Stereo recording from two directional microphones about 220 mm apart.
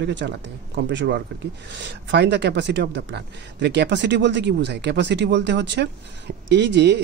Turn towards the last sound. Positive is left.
turn(degrees=-50)  # may be behind; listen again after turning